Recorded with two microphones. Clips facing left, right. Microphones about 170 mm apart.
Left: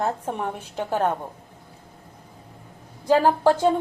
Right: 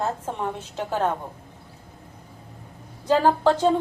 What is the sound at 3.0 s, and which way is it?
Speech, 10° left (ahead or behind).